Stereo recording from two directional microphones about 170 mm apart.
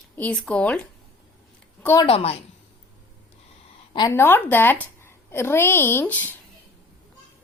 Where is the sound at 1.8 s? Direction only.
15° left (ahead or behind).